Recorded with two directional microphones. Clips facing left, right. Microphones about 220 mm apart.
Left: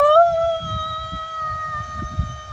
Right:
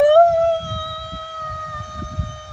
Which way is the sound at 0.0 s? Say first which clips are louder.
Right 3 dB; 20° right (ahead or behind).